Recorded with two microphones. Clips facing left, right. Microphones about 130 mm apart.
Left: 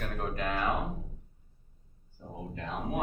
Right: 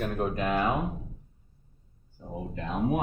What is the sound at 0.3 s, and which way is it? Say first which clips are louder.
Speech: right 4 dB; 15° right (ahead or behind).